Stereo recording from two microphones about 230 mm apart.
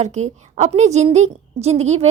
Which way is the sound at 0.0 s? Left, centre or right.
Right.